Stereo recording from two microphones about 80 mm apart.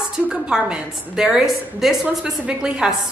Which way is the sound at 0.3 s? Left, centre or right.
Centre.